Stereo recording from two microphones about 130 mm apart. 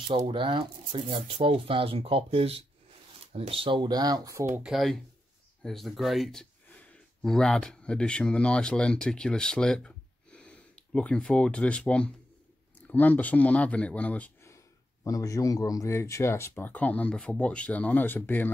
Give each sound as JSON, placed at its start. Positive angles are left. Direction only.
{"t": 0.1, "sound": "speech", "side_deg": -40}
{"t": 4.6, "sound": "speech", "side_deg": 0}
{"t": 15.0, "sound": "speech", "side_deg": 25}